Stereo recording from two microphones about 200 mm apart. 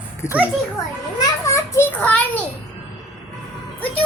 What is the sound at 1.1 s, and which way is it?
Children playing, 15° left (ahead or behind).